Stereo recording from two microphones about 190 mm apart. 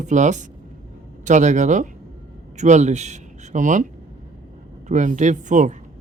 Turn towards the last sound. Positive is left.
turn(degrees=-40)  # may be behind; listen again after turning